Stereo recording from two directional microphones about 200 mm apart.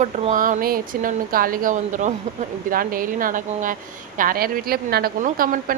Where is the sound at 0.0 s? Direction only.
40° right (ahead or behind).